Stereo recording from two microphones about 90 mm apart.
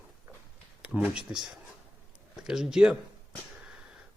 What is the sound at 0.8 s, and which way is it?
Speech, 15° right (ahead or behind).